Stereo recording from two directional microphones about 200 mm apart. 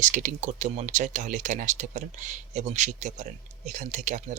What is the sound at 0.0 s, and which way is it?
Speech, 40° right (ahead or behind).